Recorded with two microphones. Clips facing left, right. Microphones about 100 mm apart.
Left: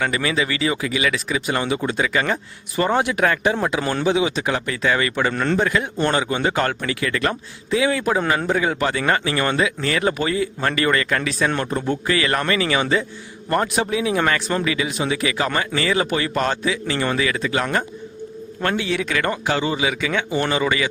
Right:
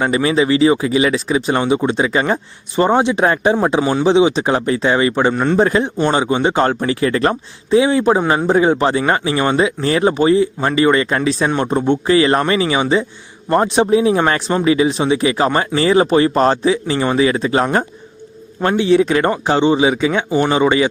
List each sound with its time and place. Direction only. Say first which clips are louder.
0.0 s speech: right 7 dB; 30° right (ahead or behind)
5.3 s a man's voice: right 5 dB; 15° right (ahead or behind)
5.5 s speech: right 6 dB; 30° right (ahead or behind)
6.0 s speech: right 4 dB; 20° right (ahead or behind)